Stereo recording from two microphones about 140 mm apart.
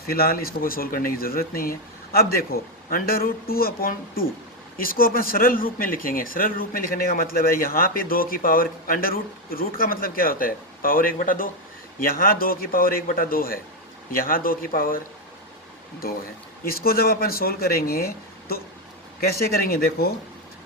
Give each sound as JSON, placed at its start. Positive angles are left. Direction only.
{"t": 0.1, "sound": "speech", "side_deg": 90}
{"t": 16.0, "sound": "speech", "side_deg": 90}